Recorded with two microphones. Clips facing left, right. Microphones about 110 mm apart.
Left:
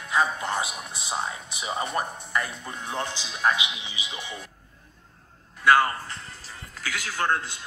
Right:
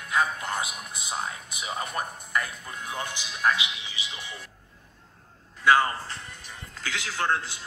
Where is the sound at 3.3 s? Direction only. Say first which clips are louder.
Even; 20° left (ahead or behind).